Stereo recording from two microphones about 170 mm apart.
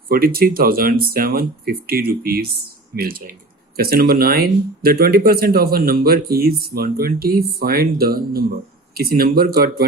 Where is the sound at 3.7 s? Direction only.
65° right (ahead or behind).